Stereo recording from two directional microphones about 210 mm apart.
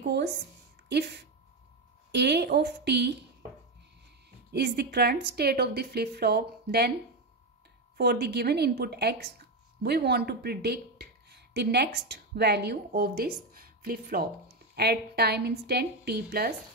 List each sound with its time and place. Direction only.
0.0 s a woman's voice: 50° right (ahead or behind)
4.5 s a woman's voice: 50° right (ahead or behind)
8.0 s a woman's voice: 50° right (ahead or behind)